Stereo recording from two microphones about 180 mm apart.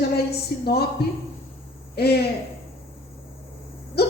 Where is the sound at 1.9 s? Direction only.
60° left (ahead or behind).